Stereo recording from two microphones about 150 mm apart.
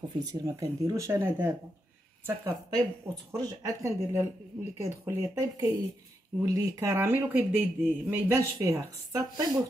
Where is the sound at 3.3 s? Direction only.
25° right (ahead or behind).